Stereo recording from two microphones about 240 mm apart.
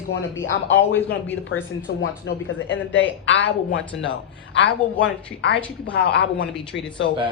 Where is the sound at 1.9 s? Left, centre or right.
Left.